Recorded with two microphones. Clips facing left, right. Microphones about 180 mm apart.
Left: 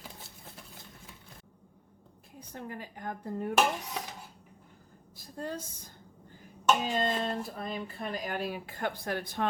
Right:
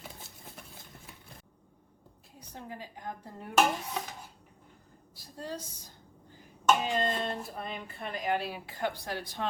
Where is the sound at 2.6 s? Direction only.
55° left (ahead or behind).